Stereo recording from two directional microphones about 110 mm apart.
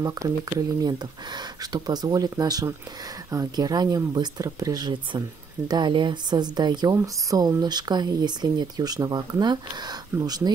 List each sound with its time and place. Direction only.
0.0 s speech: 35° right (ahead or behind)